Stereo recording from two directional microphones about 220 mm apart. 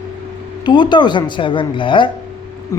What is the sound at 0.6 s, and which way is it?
A woman's voice, 20° left (ahead or behind).